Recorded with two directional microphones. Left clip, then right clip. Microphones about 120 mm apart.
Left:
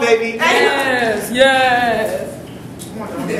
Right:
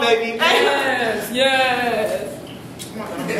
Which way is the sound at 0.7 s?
20° left (ahead or behind).